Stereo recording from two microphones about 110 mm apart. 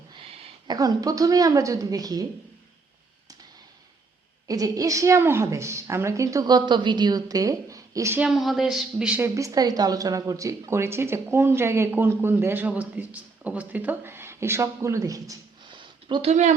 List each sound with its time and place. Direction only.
0.1 s a sound: 55° right (ahead or behind)
0.7 s a woman's voice: 35° right (ahead or behind)
4.4 s a woman's voice: 35° right (ahead or behind)
8.2 s speech: centre (ahead or behind)
9.1 s speech: 25° right (ahead or behind)
15.7 s a sound: 45° right (ahead or behind)
16.3 s speech: 90° right